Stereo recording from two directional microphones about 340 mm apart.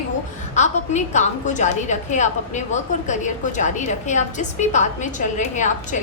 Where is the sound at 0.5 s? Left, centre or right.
Left.